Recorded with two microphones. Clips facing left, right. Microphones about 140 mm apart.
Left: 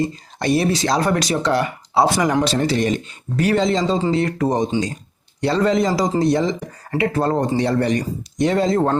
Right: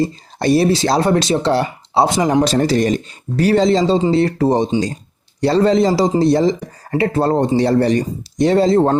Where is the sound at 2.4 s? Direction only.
40° right (ahead or behind).